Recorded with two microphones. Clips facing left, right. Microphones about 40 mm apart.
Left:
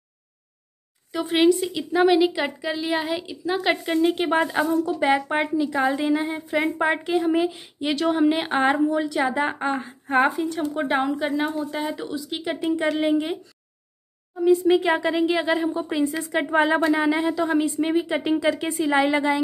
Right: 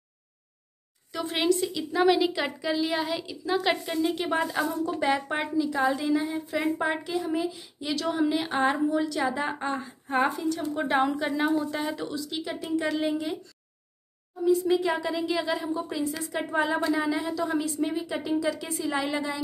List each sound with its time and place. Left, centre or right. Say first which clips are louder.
1.1 s a woman's voice: left 7 dB; centre; by 7.9 s left
7.9 s a woman's voice: left 6 dB; left
10.6 s speech: left 2 dB; centre
12.3 s a woman's voice: left 9 dB; left
14.4 s a woman's voice: left 5 dB; left
16.4 s a woman's voice: left 6 dB; left